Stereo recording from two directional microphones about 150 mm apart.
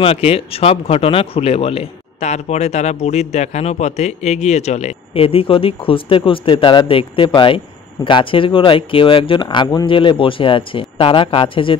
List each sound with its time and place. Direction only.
0.0 s speech: 40° left (ahead or behind)